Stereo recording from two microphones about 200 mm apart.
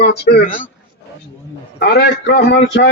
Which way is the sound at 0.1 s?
55° left (ahead or behind).